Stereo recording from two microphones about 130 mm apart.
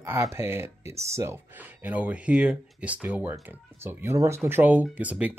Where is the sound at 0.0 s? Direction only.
20° right (ahead or behind).